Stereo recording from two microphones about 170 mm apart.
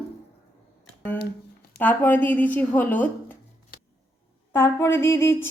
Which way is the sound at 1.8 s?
10° left (ahead or behind).